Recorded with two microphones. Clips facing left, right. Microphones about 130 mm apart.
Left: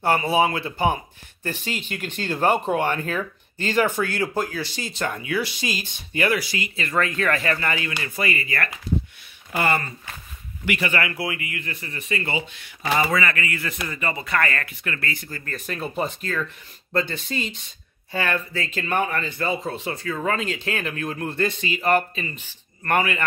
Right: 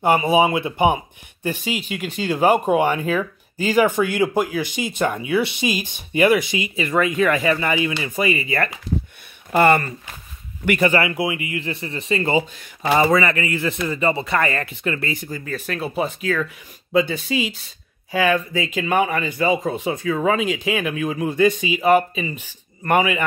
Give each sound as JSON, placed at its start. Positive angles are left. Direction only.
{"t": 0.0, "sound": "speech", "side_deg": -15}
{"t": 9.5, "sound": "speech", "side_deg": -65}
{"t": 10.6, "sound": "speech", "side_deg": -50}
{"t": 10.9, "sound": "speech", "side_deg": -25}
{"t": 15.5, "sound": "speech", "side_deg": 0}